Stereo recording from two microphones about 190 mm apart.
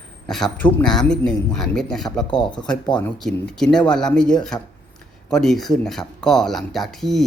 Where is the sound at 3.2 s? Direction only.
5° left (ahead or behind).